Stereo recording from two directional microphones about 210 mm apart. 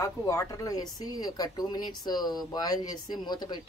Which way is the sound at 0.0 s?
15° left (ahead or behind).